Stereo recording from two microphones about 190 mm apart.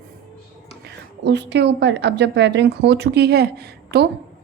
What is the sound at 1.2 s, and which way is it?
A woman's voice, 65° right (ahead or behind).